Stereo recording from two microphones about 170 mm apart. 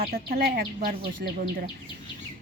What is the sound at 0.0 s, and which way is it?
Speech, 65° right (ahead or behind).